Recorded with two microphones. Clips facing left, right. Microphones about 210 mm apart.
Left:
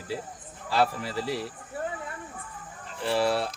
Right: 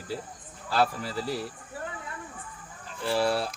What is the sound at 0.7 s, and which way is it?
Speech, centre (ahead or behind).